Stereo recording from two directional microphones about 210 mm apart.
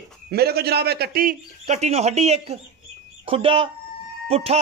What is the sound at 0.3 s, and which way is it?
Speech, 50° right (ahead or behind).